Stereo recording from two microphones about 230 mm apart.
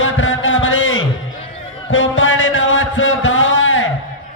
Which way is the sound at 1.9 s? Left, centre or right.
Left.